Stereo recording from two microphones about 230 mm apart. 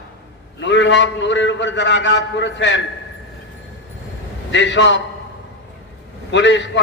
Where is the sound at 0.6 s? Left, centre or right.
Left.